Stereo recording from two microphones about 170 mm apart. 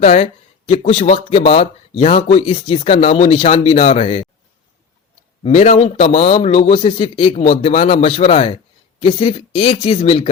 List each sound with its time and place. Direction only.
0.0 s a man's voice: 40° left (ahead or behind)
5.4 s a man's voice: 40° left (ahead or behind)